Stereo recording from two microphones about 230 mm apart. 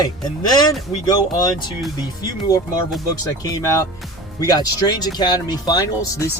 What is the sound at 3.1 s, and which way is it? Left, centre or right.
Speech, centre.